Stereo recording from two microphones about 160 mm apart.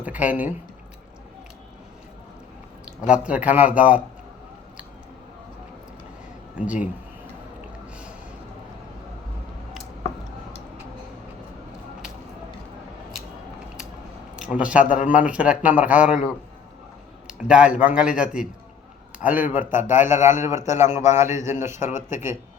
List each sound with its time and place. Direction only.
0.0 s speech: 10° right (ahead or behind)
3.1 s a man's voice: 5° right (ahead or behind)
6.6 s a man's voice: 10° right (ahead or behind)
14.5 s a man's voice: 5° right (ahead or behind)
21.8 s speech: 50° left (ahead or behind)
22.1 s a man's voice: 15° right (ahead or behind)